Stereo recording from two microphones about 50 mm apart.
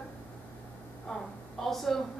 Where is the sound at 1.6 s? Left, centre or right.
Centre.